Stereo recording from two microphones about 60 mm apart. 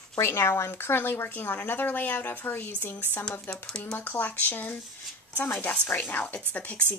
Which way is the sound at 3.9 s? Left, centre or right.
Left.